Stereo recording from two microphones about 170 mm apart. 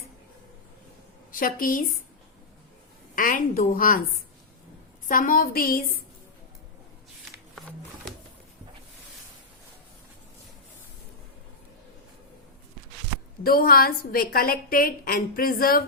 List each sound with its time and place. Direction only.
1.3 s a woman's voice: 55° left (ahead or behind)
3.2 s a woman's voice: 55° left (ahead or behind)
5.0 s a woman's voice: 55° left (ahead or behind)
13.4 s a woman's voice: 60° left (ahead or behind)